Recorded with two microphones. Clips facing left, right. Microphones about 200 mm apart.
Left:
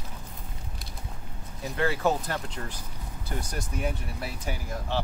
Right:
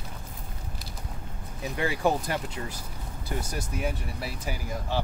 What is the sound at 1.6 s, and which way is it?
Speech, 15° right (ahead or behind).